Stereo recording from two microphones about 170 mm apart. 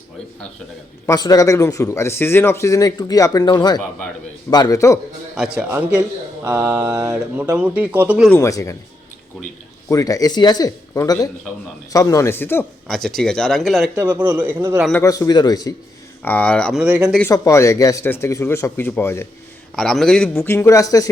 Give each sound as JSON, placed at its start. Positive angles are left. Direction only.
{"t": 1.0, "sound": "speech", "side_deg": 20}
{"t": 5.3, "sound": "mantra", "side_deg": -5}
{"t": 8.3, "sound": "speech", "side_deg": 15}
{"t": 9.9, "sound": "speech", "side_deg": 20}
{"t": 13.9, "sound": "mantra", "side_deg": -15}
{"t": 14.9, "sound": "speech", "side_deg": 20}
{"t": 16.2, "sound": "speech", "side_deg": 10}
{"t": 16.8, "sound": "mantra", "side_deg": -5}
{"t": 17.3, "sound": "speech", "side_deg": 20}
{"t": 19.7, "sound": "speech", "side_deg": 0}